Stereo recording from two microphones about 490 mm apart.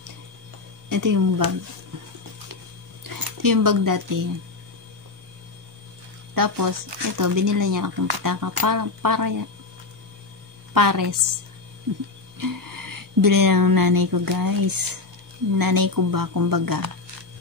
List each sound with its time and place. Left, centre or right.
0.8 s speech: right
3.0 s speech: right
6.3 s speech: right
10.7 s speech: right